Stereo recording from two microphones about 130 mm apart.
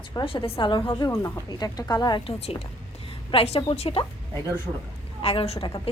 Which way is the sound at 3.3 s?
45° left (ahead or behind).